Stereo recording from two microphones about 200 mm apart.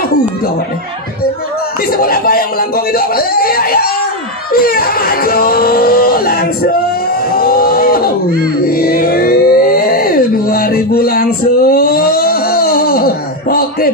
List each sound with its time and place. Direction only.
1.9 s speech: 50° left (ahead or behind)
7.3 s vehicle: 50° left (ahead or behind)
8.6 s a sound: 50° left (ahead or behind)